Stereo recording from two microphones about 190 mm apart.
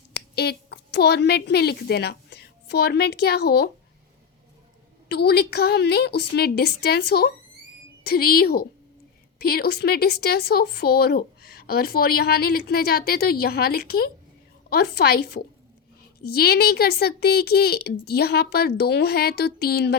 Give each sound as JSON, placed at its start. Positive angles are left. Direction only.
{"t": 0.1, "sound": "a woman's voice", "side_deg": 60}
{"t": 5.0, "sound": "speech", "side_deg": 60}